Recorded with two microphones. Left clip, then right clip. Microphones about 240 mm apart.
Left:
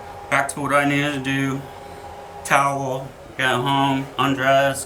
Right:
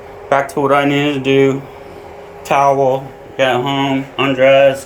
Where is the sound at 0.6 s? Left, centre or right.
Left.